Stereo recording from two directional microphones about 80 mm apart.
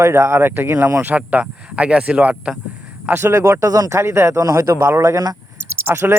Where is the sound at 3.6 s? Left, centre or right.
Right.